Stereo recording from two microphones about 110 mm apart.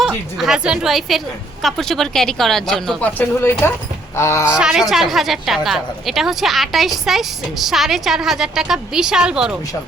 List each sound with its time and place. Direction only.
0.0 s a woman's voice: 5° right (ahead or behind)
3.2 s speech: 20° left (ahead or behind)
4.4 s a woman's voice: 10° right (ahead or behind)